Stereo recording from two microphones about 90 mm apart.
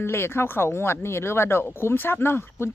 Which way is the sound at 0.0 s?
25° left (ahead or behind).